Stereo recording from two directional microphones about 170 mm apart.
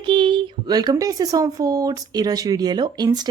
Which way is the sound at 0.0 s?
30° right (ahead or behind).